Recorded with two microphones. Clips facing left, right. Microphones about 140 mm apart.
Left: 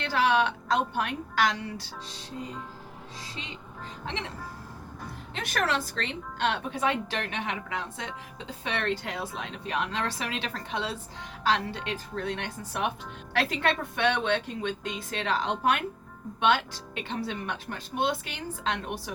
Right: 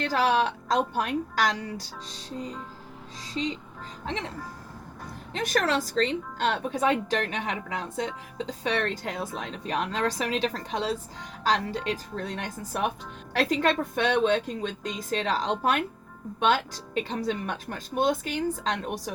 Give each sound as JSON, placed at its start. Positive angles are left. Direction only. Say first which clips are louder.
{"t": 0.0, "sound": "speech", "louder": "right 1 dB", "side_deg": -40}
{"t": 4.0, "sound": "speech", "louder": "right 3 dB", "side_deg": -40}
{"t": 5.3, "sound": "speech", "louder": "right 3 dB", "side_deg": -40}